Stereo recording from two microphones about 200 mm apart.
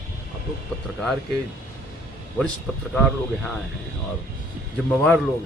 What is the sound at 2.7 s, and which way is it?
Speech, 5° left (ahead or behind).